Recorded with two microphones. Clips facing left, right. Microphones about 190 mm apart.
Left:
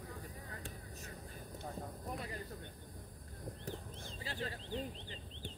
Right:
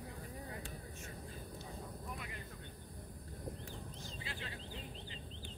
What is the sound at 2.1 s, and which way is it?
Snake, 35° left (ahead or behind).